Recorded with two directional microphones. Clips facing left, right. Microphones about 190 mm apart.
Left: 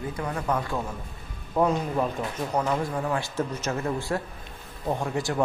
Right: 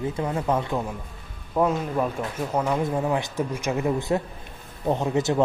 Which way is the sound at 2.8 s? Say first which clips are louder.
Right 4 dB; 20° right (ahead or behind).